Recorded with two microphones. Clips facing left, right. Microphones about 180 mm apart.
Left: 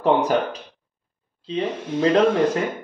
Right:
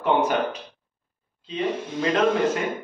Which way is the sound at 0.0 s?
35° left (ahead or behind).